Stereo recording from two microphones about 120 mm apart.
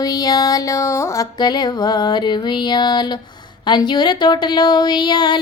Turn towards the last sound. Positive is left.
turn(degrees=40)  # may be behind; listen again after turning